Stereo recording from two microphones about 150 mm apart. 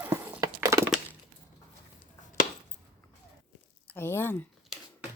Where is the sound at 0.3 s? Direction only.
20° right (ahead or behind).